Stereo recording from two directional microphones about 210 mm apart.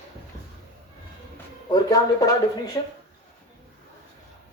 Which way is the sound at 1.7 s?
20° left (ahead or behind).